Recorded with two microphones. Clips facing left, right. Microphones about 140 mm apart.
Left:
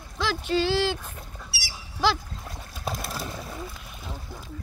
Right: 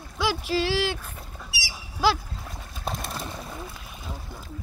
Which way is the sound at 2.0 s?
Centre (ahead or behind).